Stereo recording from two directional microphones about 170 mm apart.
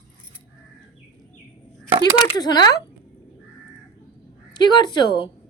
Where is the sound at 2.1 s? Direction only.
25° left (ahead or behind).